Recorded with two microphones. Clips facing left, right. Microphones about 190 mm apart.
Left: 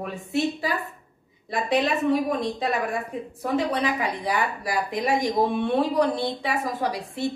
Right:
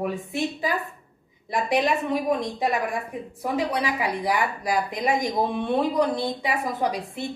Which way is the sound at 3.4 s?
10° right (ahead or behind).